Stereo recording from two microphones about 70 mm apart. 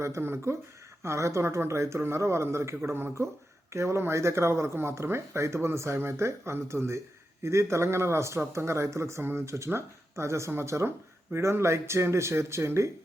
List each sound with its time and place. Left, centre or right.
0.0 s speech: right